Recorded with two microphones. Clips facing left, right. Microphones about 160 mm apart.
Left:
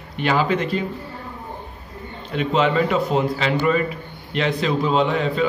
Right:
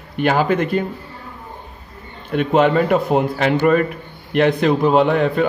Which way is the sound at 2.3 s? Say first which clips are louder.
Right 4 dB; 50° right (ahead or behind).